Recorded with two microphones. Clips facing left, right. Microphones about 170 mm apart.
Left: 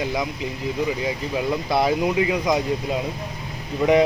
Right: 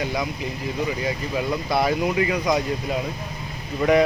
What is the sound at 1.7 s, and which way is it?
Speech, 20° left (ahead or behind).